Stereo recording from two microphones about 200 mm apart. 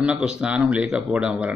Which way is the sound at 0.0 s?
5° right (ahead or behind).